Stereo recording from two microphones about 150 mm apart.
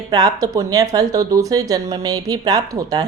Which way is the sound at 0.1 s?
25° right (ahead or behind).